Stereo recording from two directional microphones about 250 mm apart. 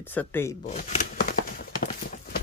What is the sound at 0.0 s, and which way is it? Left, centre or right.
Speech, centre.